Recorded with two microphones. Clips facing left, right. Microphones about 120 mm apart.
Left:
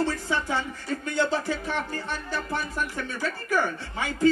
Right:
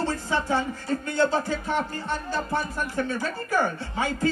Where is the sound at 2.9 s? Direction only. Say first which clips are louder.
Right 4 dB; 35° right (ahead or behind).